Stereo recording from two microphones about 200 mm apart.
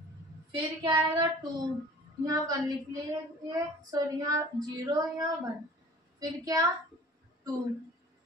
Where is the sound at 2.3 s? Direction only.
20° right (ahead or behind).